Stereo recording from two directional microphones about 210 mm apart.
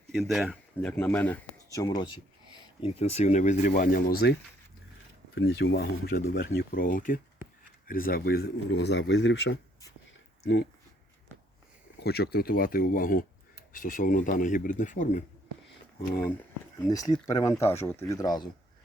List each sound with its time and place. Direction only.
0.1 s speech: centre (ahead or behind); by 4.1 s 40° left (ahead or behind)
5.3 s speech: 60° left (ahead or behind)
11.9 s speech: 50° left (ahead or behind)
16.7 s speech: 15° left (ahead or behind)